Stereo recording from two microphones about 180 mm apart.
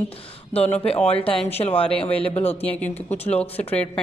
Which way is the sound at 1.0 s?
30° left (ahead or behind).